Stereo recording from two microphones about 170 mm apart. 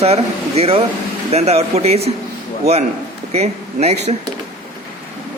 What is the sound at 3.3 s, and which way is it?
Speech, 40° right (ahead or behind).